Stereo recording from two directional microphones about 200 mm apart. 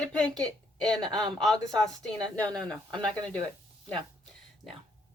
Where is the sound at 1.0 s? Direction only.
20° right (ahead or behind).